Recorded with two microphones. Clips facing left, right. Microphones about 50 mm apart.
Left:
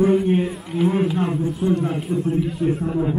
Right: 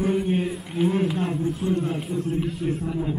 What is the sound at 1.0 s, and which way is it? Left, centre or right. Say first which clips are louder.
Speech: left 3 dB; centre.